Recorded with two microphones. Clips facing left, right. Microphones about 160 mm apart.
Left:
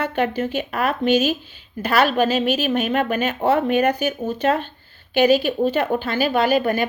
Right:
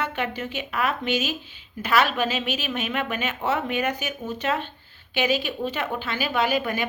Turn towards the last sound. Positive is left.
turn(degrees=45)  # may be behind; listen again after turning